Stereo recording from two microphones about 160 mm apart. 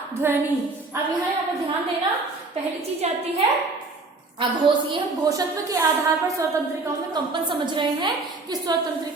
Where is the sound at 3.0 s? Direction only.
40° right (ahead or behind).